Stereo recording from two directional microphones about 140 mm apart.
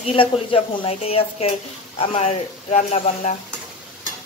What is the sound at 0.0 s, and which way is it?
A woman's voice, 40° left (ahead or behind).